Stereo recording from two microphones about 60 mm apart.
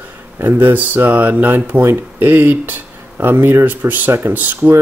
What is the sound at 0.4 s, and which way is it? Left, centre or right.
Speech, right.